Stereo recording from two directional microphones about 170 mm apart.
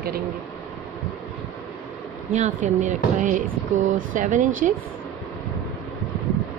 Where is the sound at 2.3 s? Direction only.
45° right (ahead or behind).